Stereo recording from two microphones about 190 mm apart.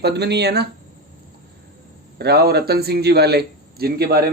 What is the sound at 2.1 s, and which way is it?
Speech, 55° right (ahead or behind).